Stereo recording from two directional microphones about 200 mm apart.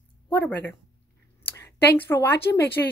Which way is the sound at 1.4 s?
10° left (ahead or behind).